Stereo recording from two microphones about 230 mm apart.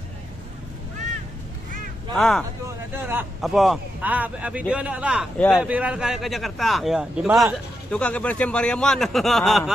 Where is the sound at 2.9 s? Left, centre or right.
Centre.